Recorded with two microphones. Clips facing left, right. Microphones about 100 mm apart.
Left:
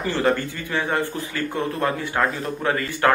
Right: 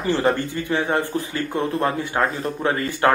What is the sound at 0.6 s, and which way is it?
Speech, 25° right (ahead or behind).